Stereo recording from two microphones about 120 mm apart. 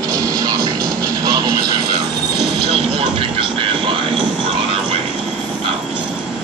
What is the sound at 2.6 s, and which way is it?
Train, 55° right (ahead or behind).